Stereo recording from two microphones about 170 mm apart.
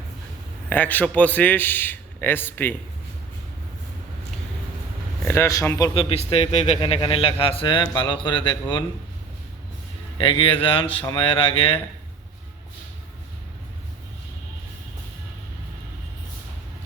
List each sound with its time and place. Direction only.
0.7 s a man's voice: 10° left (ahead or behind)
5.2 s a man's voice: 15° left (ahead or behind); by 8.5 s 30° left (ahead or behind)
10.2 s a man's voice: 30° left (ahead or behind)